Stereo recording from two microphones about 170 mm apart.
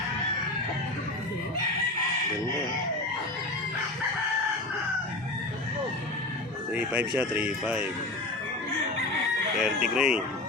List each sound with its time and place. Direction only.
6.7 s speech: 10° right (ahead or behind)
9.6 s speech: 5° right (ahead or behind)